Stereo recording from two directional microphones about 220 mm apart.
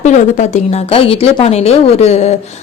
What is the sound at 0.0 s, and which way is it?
Speech, 30° left (ahead or behind).